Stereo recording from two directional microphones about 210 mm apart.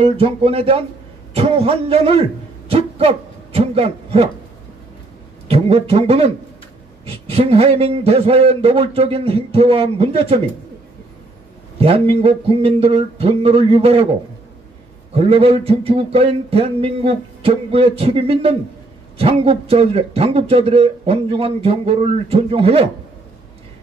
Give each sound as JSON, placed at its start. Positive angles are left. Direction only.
{"t": 0.0, "sound": "a man's voice", "side_deg": -25}
{"t": 5.5, "sound": "a man's voice", "side_deg": -30}
{"t": 11.8, "sound": "a man's voice", "side_deg": -25}
{"t": 15.1, "sound": "a man's voice", "side_deg": -25}